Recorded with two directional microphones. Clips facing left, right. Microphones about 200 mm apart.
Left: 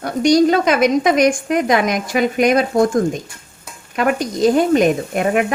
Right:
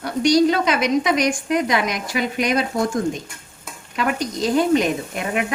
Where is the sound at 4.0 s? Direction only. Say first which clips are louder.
Left 5 dB; 50° left (ahead or behind).